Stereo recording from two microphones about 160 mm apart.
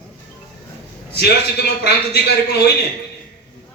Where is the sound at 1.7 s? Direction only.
90° left.